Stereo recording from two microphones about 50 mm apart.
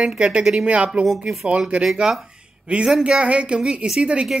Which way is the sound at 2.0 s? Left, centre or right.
Centre.